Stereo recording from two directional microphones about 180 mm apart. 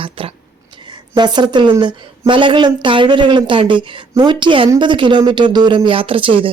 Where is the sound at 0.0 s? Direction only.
30° right (ahead or behind).